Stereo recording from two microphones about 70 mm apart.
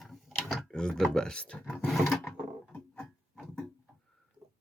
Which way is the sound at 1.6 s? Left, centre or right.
Left.